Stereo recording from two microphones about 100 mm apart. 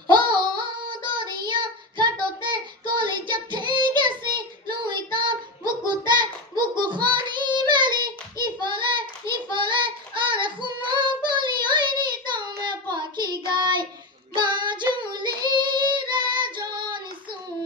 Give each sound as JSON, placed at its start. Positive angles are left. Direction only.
{"t": 0.1, "sound": "female singing", "side_deg": -50}
{"t": 0.8, "sound": "child singing", "side_deg": -50}
{"t": 12.9, "sound": "child singing", "side_deg": -45}